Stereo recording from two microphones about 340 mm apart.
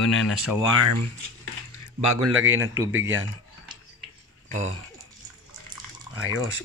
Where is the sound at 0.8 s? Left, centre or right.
Right.